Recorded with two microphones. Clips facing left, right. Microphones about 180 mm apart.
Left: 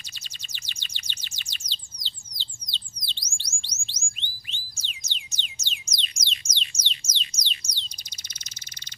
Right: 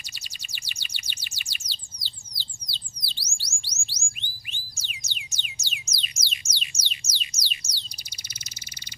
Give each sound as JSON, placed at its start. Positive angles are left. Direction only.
{"t": 0.5, "sound": "bird", "side_deg": -10}
{"t": 2.7, "sound": "music", "side_deg": -10}